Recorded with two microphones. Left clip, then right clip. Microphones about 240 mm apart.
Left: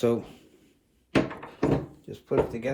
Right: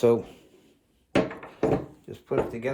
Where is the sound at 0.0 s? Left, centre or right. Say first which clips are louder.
Right 4 dB; centre.